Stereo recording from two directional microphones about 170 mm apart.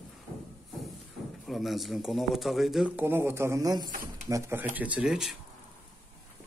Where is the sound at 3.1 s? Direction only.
15° right (ahead or behind).